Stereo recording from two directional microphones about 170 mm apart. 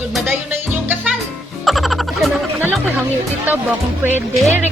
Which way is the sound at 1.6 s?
Centre (ahead or behind).